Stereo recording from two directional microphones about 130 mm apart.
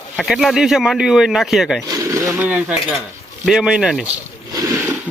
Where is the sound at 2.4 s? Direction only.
10° right (ahead or behind).